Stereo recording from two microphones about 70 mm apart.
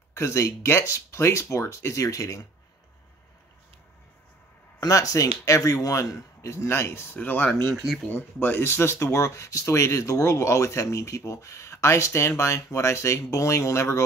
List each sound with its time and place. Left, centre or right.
0.1 s speech: left
4.7 s speech: left
7.7 s speech: centre
8.1 s speech: left